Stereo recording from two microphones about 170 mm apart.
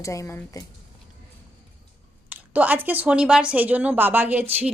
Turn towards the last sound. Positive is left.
turn(degrees=-10)  # may be behind; listen again after turning